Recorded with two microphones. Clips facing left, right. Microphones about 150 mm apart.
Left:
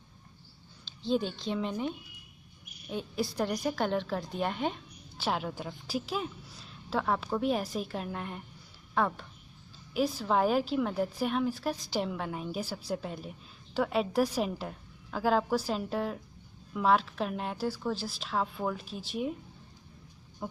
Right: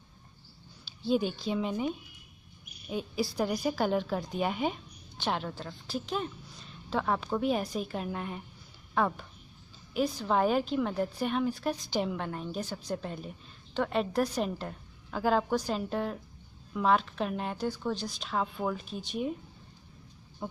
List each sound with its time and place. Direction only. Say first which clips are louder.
0.8 s a woman's voice: right 2 dB; 5° right (ahead or behind)